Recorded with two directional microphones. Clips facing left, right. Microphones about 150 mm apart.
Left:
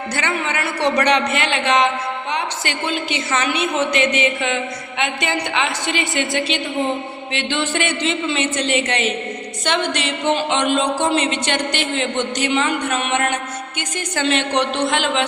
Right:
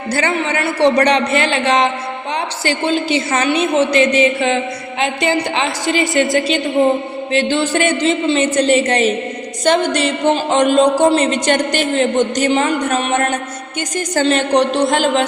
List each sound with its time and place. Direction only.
0.1 s speech: 35° right (ahead or behind)